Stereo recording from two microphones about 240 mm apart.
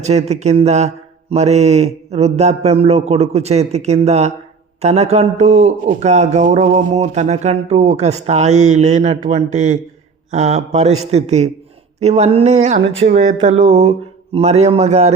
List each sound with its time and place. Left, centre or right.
0.0 s a man's voice: right